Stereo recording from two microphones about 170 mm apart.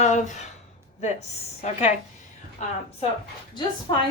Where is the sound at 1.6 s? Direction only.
40° left (ahead or behind).